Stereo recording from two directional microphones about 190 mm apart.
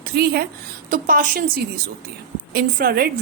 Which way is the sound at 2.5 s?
50° right (ahead or behind).